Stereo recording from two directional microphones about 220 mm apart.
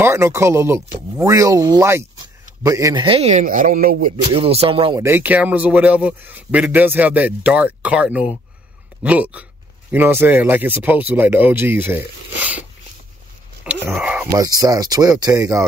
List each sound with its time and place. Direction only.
0.0 s speech: 10° right (ahead or behind); by 4.1 s 40° right (ahead or behind)
4.3 s speech: 25° right (ahead or behind)
5.0 s speech: 10° right (ahead or behind)
13.7 s a sound: 5° right (ahead or behind)
14.3 s speech: 15° right (ahead or behind)